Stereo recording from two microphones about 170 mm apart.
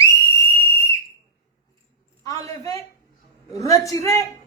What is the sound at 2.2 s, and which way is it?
A woman's voice, 20° left (ahead or behind).